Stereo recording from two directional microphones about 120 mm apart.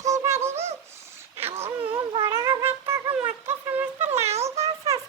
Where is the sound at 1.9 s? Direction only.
35° right (ahead or behind).